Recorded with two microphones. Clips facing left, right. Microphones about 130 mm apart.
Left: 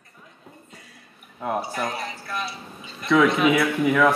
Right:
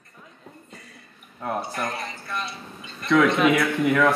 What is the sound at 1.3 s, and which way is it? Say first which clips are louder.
Speech: left 2 dB; 5° left (ahead or behind).